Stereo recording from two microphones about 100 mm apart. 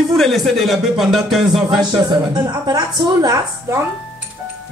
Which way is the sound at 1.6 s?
45° right (ahead or behind).